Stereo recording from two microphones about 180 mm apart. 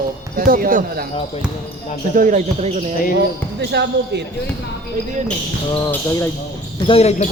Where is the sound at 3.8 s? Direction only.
75° right (ahead or behind).